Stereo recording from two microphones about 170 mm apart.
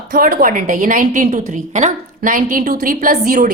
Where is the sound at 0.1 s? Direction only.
55° right (ahead or behind).